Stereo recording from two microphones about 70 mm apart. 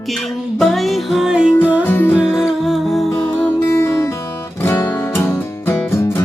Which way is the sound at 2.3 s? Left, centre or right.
Centre.